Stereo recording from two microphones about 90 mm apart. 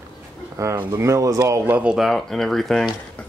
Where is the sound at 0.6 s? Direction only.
35° right (ahead or behind).